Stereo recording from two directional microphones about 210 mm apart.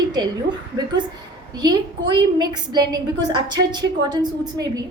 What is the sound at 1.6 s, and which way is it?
A woman's voice, 20° right (ahead or behind).